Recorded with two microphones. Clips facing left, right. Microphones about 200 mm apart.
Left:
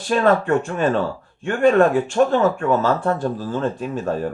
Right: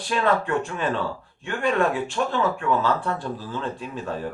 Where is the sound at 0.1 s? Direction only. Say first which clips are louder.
Left 6 dB; 45° left (ahead or behind).